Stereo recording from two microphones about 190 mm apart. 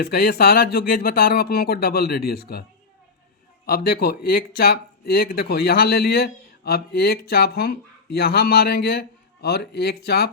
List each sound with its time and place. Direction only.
0.0 s speech: 55° left (ahead or behind)
3.7 s speech: 55° left (ahead or behind)